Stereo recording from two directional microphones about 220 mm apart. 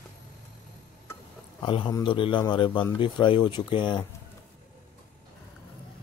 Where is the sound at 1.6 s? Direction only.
20° left (ahead or behind).